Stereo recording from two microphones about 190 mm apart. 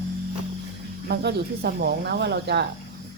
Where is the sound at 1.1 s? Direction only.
60° right (ahead or behind).